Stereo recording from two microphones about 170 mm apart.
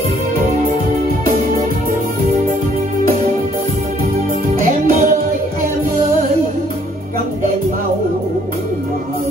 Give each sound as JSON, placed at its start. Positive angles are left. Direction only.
{"t": 4.6, "sound": "music", "side_deg": -50}